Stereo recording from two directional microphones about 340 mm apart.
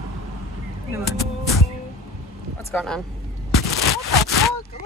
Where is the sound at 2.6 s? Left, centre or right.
Centre.